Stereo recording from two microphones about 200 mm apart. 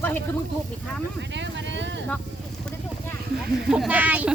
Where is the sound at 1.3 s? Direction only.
65° right (ahead or behind).